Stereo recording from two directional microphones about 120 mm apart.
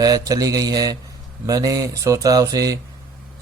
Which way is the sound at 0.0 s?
30° right (ahead or behind).